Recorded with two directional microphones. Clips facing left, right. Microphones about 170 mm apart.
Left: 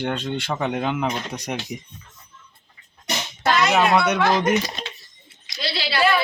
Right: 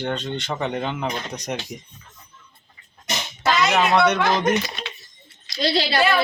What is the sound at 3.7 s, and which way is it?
Speech, 10° left (ahead or behind).